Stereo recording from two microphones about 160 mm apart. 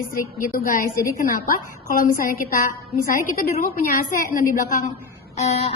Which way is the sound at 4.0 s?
60° left (ahead or behind).